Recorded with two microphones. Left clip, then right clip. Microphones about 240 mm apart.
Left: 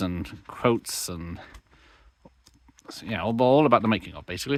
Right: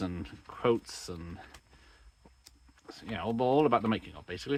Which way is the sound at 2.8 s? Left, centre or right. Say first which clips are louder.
Left 7 dB; left.